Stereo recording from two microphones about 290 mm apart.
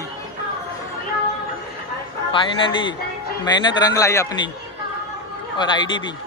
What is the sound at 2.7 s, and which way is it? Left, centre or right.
Speech, centre.